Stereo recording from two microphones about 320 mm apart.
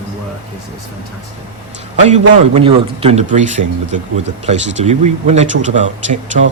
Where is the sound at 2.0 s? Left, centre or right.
Right.